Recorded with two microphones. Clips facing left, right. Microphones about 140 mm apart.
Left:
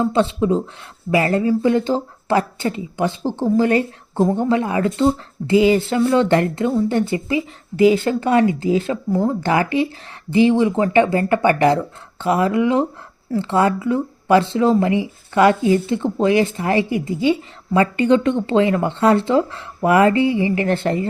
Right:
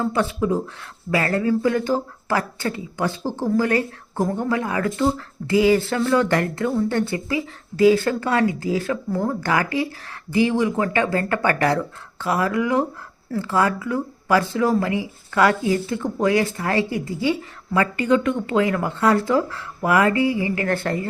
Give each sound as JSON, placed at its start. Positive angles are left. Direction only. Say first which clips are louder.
{"t": 0.0, "sound": "speech", "louder": "left 4 dB", "side_deg": 25}